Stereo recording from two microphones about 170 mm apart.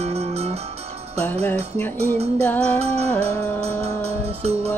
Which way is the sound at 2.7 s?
35° right (ahead or behind).